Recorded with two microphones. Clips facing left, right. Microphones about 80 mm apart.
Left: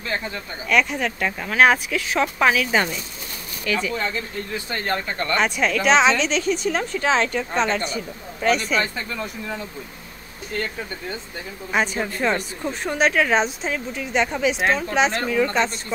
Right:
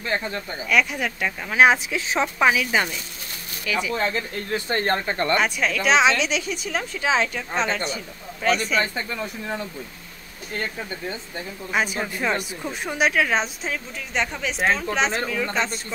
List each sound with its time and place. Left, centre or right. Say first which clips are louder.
0.7 s a woman's voice: left 2 dB; centre
1.5 s speech: even; centre
2.3 s a woman's voice: even; centre
4.6 s speech: right 3 dB; right
5.3 s a woman's voice: left 3 dB; centre
11.7 s a woman's voice: left 2 dB; centre